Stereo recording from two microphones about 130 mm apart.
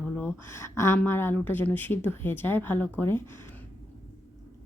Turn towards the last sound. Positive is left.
turn(degrees=15)  # may be behind; listen again after turning